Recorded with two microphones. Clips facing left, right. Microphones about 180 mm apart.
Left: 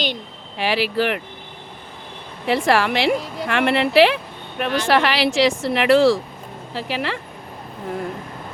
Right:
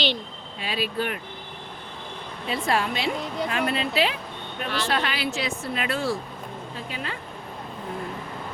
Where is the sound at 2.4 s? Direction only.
80° left.